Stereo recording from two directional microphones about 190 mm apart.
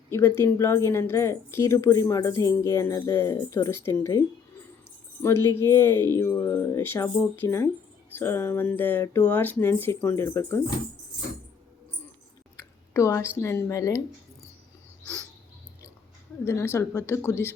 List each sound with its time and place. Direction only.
0.1 s speech: 15° left (ahead or behind)
5.2 s speech: 15° left (ahead or behind)
12.9 s speech: 15° left (ahead or behind)
16.5 s speech: 15° left (ahead or behind)